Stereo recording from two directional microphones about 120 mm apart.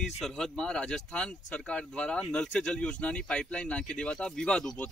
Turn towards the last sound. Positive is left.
turn(degrees=5)  # may be behind; listen again after turning